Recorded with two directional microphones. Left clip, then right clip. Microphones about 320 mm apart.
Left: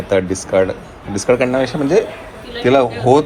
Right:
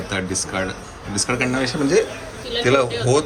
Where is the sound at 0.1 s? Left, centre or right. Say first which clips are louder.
Left 10 dB; centre.